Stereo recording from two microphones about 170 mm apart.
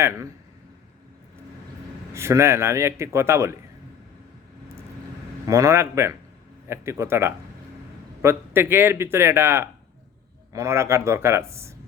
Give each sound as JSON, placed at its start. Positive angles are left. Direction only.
{"t": 0.0, "sound": "a man's voice", "side_deg": -15}
{"t": 2.1, "sound": "a man's voice", "side_deg": -15}
{"t": 5.5, "sound": "a man's voice", "side_deg": -20}